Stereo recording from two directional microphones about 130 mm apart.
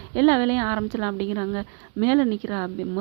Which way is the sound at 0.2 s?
30° right (ahead or behind).